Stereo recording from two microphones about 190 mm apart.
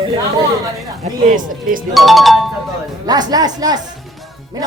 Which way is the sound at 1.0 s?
45° right (ahead or behind).